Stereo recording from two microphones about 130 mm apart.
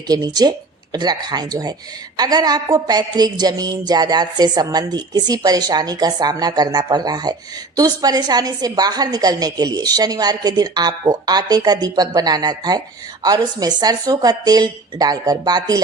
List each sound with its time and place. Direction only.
0.1 s a woman's voice: 30° right (ahead or behind)